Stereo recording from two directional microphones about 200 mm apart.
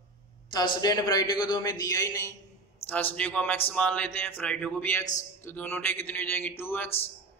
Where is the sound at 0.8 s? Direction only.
20° left (ahead or behind).